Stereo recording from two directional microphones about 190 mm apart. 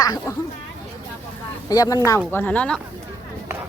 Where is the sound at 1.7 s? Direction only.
20° left (ahead or behind).